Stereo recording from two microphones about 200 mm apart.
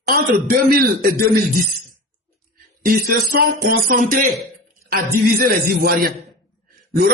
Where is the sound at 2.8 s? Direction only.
45° right (ahead or behind).